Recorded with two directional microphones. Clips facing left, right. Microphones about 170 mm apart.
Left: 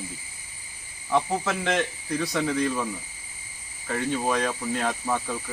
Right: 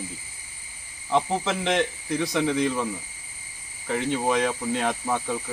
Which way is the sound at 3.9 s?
20° right (ahead or behind).